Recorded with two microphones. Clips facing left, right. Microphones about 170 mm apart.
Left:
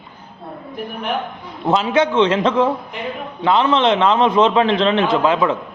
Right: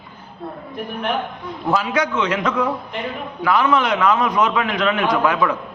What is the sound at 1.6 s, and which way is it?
A man's voice, 25° left (ahead or behind).